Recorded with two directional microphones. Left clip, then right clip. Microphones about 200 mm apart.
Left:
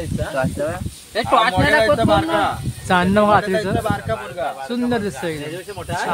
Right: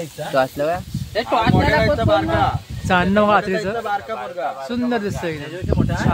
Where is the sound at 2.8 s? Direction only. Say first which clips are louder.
Left 1 dB; centre (ahead or behind).